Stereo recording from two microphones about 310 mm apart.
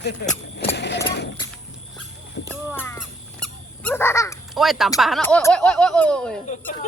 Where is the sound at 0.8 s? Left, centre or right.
Left.